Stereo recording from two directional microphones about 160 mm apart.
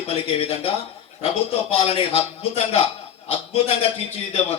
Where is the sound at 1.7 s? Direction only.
35° left (ahead or behind).